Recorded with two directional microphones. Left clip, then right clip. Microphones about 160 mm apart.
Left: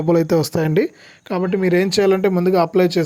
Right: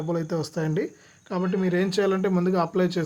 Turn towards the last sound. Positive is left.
turn(degrees=40)  # may be behind; listen again after turning